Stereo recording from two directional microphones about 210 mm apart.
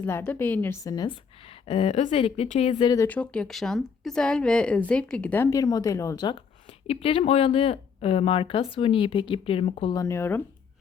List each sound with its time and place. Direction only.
0.0 s a woman's voice: 10° left (ahead or behind)